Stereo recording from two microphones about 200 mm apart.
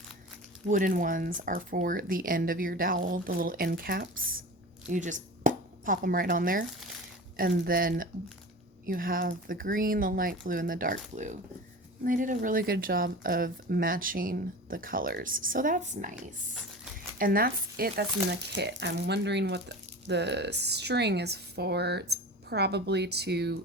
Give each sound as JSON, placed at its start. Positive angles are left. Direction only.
{"t": 0.7, "sound": "a woman's voice", "side_deg": -40}